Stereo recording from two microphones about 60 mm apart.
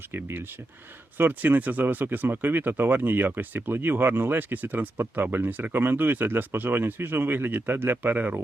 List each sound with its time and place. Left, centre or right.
0.1 s speech: right